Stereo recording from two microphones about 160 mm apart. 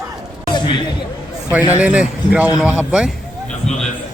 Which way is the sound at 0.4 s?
30° left (ahead or behind).